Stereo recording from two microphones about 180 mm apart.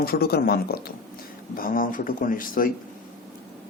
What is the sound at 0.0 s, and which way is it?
Speech, 60° left (ahead or behind).